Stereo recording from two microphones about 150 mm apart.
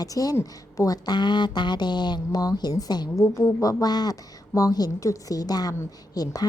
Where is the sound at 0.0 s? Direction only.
25° left (ahead or behind).